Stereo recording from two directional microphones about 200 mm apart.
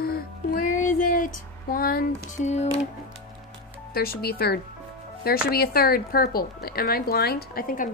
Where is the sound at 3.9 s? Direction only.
50° left (ahead or behind).